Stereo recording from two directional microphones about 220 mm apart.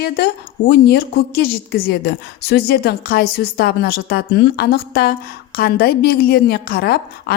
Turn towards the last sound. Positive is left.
turn(degrees=45)  # may be behind; listen again after turning